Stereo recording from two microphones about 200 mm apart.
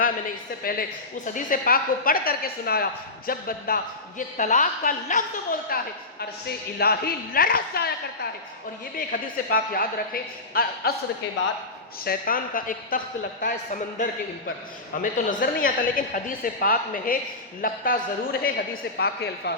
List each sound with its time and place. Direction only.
0.6 s a woman's voice: 45° left (ahead or behind)
12.0 s a woman's voice: 45° left (ahead or behind)